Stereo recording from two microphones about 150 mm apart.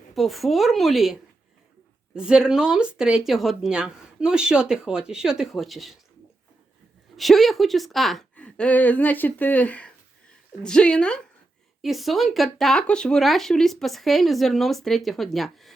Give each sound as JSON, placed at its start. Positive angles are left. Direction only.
{"t": 0.1, "sound": "speech", "side_deg": 0}
{"t": 2.1, "sound": "speech", "side_deg": -5}
{"t": 7.2, "sound": "a woman's voice", "side_deg": 0}